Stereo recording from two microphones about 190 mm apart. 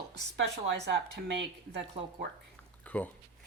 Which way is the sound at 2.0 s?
35° right (ahead or behind).